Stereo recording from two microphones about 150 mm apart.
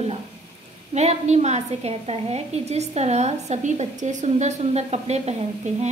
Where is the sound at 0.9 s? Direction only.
50° right (ahead or behind).